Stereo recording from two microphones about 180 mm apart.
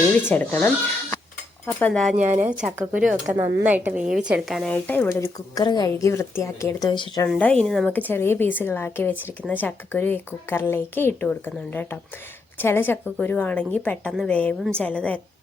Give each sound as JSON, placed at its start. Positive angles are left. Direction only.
{"t": 0.3, "sound": "a woman's voice", "side_deg": 10}
{"t": 1.6, "sound": "cutlery", "side_deg": 5}
{"t": 2.2, "sound": "speech", "side_deg": -40}
{"t": 2.5, "sound": "a woman's voice", "side_deg": -5}
{"t": 7.3, "sound": "a woman's voice", "side_deg": 5}